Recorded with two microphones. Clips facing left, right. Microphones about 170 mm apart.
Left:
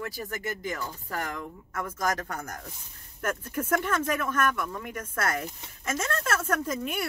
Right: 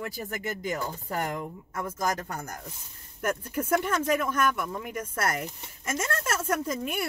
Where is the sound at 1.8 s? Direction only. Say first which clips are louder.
Even; 10° right (ahead or behind).